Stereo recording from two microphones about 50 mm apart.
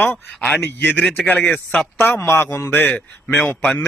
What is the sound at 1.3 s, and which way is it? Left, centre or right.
Speech, left.